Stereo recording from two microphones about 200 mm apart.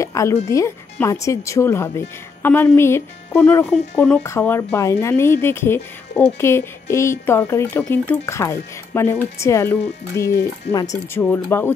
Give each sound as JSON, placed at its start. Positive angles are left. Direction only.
{"t": 0.0, "sound": "speech", "side_deg": 15}